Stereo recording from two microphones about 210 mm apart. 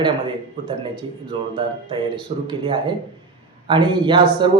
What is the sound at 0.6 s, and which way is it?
Speech, 25° right (ahead or behind).